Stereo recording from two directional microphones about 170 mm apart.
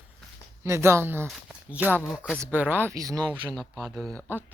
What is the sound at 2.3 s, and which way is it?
Speech, 10° right (ahead or behind).